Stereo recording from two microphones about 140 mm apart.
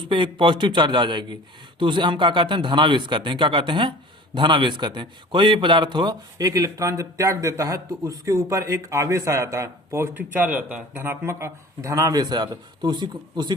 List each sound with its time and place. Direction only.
0.0 s a man's voice: 35° right (ahead or behind)